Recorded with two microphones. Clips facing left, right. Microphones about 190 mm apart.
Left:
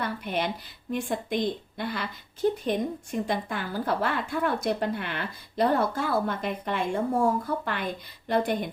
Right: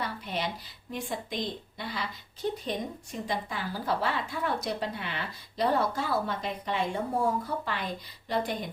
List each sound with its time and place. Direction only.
0.0 s a woman's voice: 55° left (ahead or behind)